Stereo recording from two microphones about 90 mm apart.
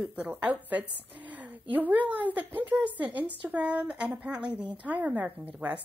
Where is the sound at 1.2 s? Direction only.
15° right (ahead or behind).